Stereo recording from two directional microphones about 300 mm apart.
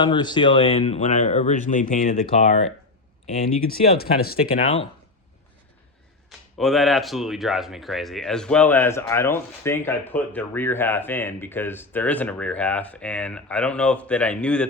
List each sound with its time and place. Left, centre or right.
0.0 s speech: centre; by 4.7 s left
6.6 s speech: centre